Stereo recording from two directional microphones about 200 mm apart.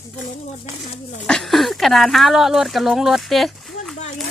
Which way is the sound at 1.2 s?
Centre (ahead or behind).